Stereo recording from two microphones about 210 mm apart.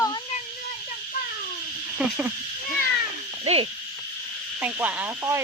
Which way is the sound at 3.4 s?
30° right (ahead or behind).